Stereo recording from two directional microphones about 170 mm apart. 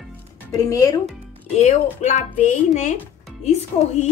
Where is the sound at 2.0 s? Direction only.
45° left (ahead or behind).